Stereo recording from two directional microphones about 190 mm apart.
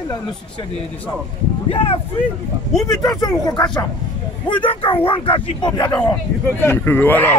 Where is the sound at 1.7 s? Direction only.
30° left (ahead or behind).